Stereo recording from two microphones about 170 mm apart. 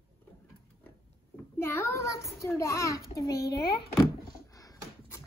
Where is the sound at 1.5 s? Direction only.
15° left (ahead or behind).